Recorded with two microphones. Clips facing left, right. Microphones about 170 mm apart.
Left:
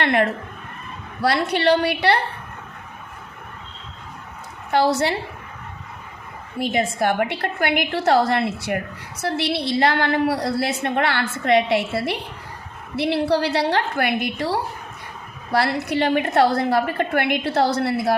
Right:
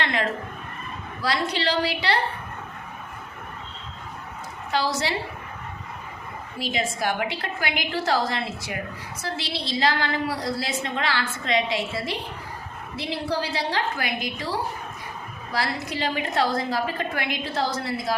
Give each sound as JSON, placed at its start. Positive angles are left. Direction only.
{"t": 0.0, "sound": "a woman's voice", "side_deg": 60}
{"t": 4.7, "sound": "a woman's voice", "side_deg": 60}
{"t": 6.6, "sound": "a woman's voice", "side_deg": 55}